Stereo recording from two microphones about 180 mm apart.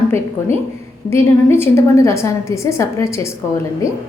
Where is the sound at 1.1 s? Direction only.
15° left (ahead or behind).